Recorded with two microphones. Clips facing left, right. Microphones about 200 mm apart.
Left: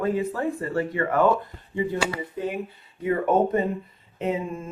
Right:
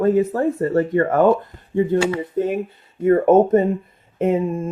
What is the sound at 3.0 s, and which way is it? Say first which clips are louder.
Speech: right 8 dB; 45° right (ahead or behind).